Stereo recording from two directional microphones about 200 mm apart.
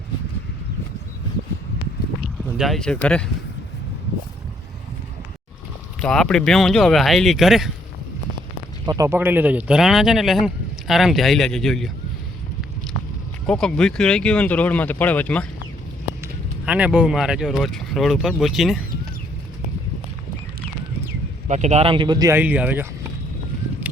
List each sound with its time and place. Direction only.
2.4 s speech: centre (ahead or behind)
6.0 s speech: 5° left (ahead or behind)
8.9 s speech: 15° right (ahead or behind); by 11.9 s centre (ahead or behind)
13.5 s speech: 5° left (ahead or behind)
16.2 s speech: 5° right (ahead or behind)
21.4 s speech: 35° right (ahead or behind); by 22.9 s 10° right (ahead or behind)